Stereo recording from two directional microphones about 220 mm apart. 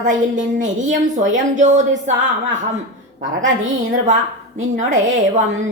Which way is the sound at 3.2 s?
35° right (ahead or behind).